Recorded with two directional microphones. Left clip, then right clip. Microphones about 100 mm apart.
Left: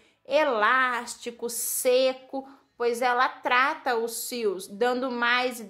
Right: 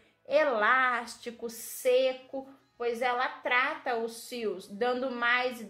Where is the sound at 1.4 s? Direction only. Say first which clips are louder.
Left 4 dB; 40° left (ahead or behind).